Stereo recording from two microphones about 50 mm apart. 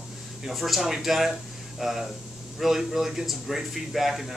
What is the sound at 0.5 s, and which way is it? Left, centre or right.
Speech, centre.